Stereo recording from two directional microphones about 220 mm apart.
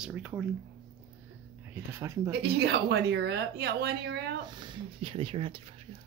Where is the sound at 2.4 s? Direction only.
45° right (ahead or behind).